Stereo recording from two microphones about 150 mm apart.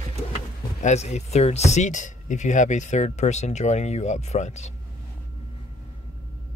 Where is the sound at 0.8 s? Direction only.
50° left (ahead or behind).